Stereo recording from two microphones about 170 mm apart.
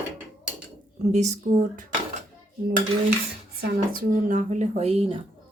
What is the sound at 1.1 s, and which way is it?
Speech, 40° right (ahead or behind).